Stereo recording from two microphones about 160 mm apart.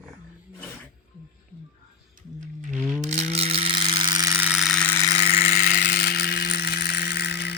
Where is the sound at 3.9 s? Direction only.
25° right (ahead or behind).